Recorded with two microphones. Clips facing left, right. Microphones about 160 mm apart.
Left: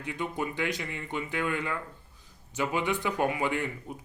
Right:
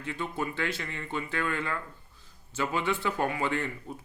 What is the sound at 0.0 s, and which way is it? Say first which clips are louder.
Speech: left 1 dB; 15° left (ahead or behind).